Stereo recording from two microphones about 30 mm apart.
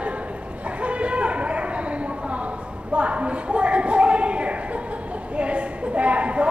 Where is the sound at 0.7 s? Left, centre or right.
Right.